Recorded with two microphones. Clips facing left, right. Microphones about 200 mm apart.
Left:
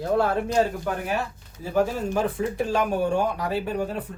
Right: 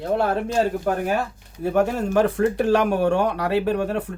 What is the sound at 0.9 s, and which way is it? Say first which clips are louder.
Speech: right 5 dB; 45° right (ahead or behind).